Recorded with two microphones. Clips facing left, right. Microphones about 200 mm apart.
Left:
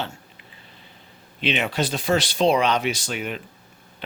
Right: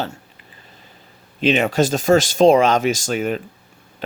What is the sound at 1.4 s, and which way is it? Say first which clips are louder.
Speech: right 7 dB; 45° right (ahead or behind).